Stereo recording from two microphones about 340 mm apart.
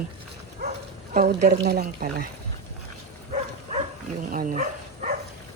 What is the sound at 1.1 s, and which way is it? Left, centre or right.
Speech, right.